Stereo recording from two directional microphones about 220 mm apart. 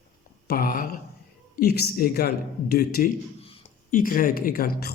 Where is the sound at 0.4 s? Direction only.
40° left (ahead or behind).